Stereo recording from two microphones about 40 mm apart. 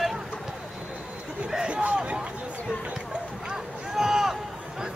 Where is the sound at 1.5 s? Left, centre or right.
Right.